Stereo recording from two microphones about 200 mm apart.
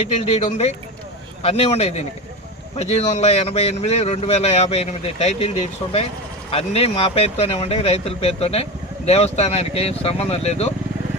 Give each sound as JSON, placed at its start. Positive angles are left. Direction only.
{"t": 0.3, "sound": "speech", "side_deg": 35}